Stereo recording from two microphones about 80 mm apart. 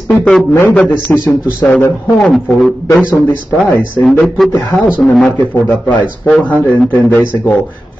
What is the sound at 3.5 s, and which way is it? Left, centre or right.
Speech, left.